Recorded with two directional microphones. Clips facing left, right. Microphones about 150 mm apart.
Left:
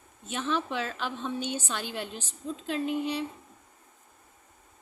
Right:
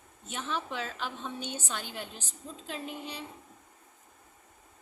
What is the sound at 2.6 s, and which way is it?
Speech, 75° left (ahead or behind).